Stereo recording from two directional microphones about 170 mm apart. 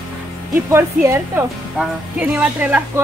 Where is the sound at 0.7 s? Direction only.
15° right (ahead or behind).